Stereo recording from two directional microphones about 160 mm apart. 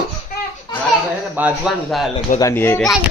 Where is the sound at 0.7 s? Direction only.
25° left (ahead or behind).